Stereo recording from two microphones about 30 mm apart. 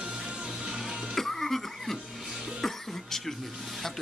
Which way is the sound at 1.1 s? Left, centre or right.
Centre.